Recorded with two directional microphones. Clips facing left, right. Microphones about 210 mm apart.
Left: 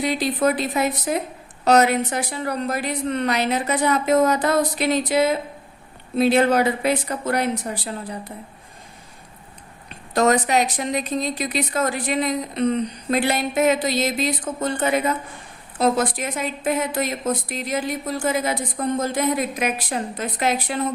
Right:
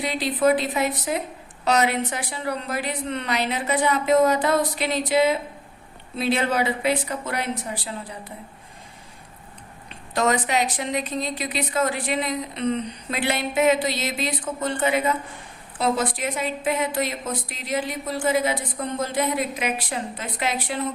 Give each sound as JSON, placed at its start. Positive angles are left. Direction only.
{"t": 0.0, "sound": "a woman's voice", "side_deg": 45}
{"t": 10.2, "sound": "a woman's voice", "side_deg": 40}